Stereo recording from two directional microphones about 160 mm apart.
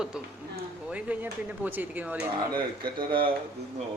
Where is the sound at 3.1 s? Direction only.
30° right (ahead or behind).